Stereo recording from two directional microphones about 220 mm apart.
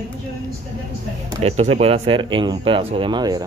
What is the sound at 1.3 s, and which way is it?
Speech, 30° right (ahead or behind).